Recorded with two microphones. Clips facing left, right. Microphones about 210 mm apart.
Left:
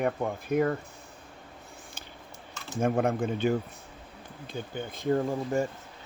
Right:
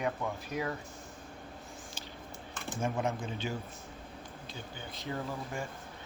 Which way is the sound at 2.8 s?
55° left (ahead or behind).